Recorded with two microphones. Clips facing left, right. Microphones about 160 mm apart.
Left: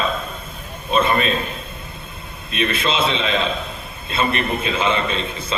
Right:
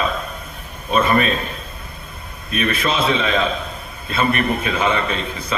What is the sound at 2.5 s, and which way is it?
A man's voice, 25° left (ahead or behind).